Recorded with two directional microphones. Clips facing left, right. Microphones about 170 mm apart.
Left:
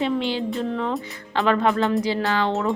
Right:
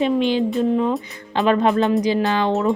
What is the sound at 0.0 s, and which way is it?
Speech, 20° right (ahead or behind).